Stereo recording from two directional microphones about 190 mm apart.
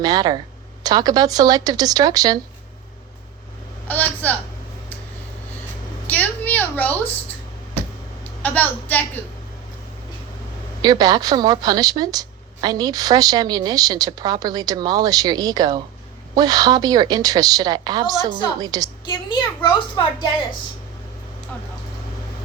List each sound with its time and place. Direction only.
0.0 s speech: 20° right (ahead or behind)
3.8 s a sound: 10° left (ahead or behind)
6.1 s a sound: 10° left (ahead or behind)
8.4 s a woman's voice: 10° left (ahead or behind)
10.8 s speech: 20° right (ahead or behind)
19.0 s a child's voice: 20° left (ahead or behind)